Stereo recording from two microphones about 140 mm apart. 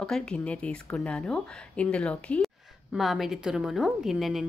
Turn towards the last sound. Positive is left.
turn(degrees=0)  # may be behind; listen again after turning